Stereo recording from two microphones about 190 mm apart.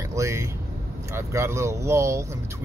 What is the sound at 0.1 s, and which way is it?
Vehicle, 15° right (ahead or behind).